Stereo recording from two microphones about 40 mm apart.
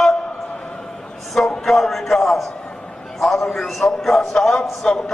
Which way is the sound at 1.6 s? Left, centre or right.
Centre.